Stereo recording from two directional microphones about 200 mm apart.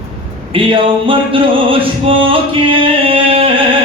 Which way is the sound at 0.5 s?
25° right (ahead or behind).